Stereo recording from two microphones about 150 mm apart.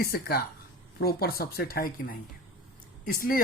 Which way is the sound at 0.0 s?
90° left.